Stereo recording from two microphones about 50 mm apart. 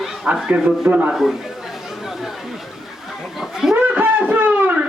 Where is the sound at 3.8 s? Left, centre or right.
Right.